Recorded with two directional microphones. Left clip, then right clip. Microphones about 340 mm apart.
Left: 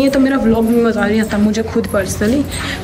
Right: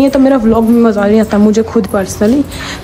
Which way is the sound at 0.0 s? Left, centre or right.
Centre.